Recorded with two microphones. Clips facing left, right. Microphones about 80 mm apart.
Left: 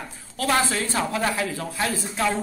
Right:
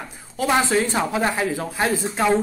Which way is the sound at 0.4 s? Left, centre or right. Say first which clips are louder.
Right 4 dB; centre.